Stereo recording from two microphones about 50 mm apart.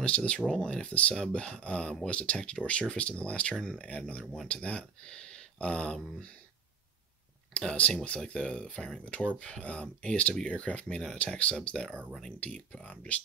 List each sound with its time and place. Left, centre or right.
0.0 s speech: left
3.5 s speech: centre
7.5 s speech: left